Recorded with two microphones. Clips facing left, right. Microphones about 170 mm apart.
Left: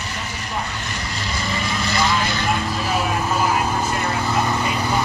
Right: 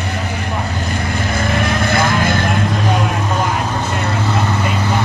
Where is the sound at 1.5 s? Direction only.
55° right (ahead or behind).